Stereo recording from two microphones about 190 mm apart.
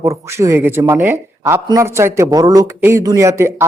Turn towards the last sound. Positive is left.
turn(degrees=-15)  # may be behind; listen again after turning